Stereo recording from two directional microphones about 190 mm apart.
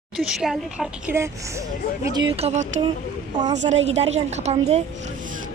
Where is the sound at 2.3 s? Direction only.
35° right (ahead or behind).